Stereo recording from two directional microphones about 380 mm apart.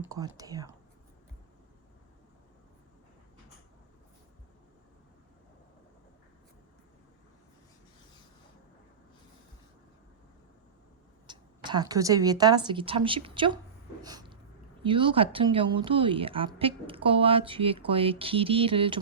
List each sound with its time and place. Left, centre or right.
0.0 s speech: centre
11.3 s speech: centre
14.0 s a sound: centre
14.8 s speech: centre